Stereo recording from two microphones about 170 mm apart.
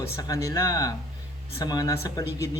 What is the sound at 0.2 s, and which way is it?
A man's voice, 20° left (ahead or behind).